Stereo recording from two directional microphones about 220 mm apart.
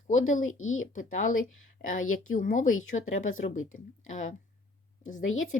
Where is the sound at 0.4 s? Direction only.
65° left (ahead or behind).